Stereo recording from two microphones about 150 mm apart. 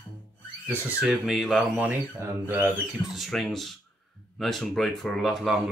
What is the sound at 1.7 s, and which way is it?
Speech, 10° right (ahead or behind).